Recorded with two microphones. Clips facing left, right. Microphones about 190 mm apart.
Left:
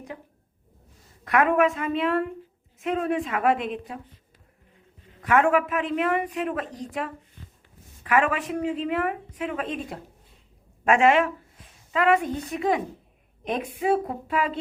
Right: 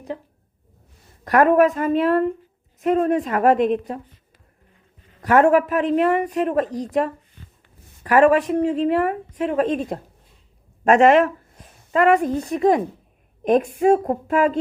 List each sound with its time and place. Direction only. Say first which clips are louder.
1.2 s speech: right 6 dB; 40° right (ahead or behind)
5.2 s a woman's voice: right 6 dB; 40° right (ahead or behind)